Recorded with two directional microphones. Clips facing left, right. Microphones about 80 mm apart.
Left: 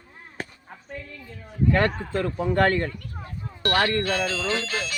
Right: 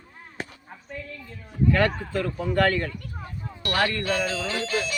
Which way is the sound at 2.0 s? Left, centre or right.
Left.